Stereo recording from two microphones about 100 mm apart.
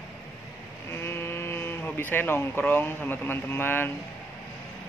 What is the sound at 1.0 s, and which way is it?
Sheep, 25° left (ahead or behind).